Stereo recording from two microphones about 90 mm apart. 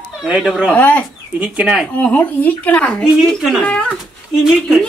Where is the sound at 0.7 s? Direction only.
15° left (ahead or behind).